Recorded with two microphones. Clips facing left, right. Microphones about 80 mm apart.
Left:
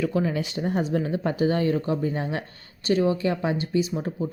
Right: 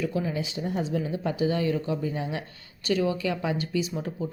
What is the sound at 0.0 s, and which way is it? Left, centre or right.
Speech, left.